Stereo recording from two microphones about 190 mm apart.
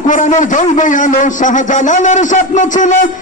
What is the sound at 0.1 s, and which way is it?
A man's voice, 40° left (ahead or behind).